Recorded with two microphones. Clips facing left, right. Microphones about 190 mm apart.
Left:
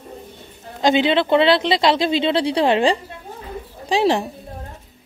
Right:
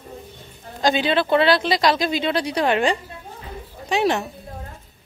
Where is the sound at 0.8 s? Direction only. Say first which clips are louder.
Left 3 dB; 20° left (ahead or behind).